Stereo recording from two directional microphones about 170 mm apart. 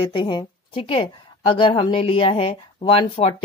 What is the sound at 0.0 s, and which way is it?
A woman's voice, 30° left (ahead or behind).